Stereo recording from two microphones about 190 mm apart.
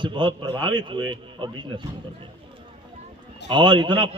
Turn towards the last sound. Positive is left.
turn(degrees=-25)  # may be behind; listen again after turning